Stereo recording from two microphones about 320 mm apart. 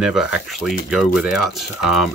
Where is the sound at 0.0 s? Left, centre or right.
Centre.